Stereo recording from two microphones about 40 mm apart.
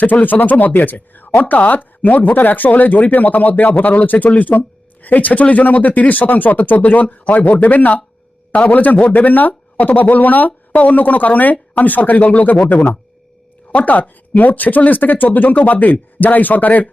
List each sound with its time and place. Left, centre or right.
0.0 s speech: left
13.7 s speech: left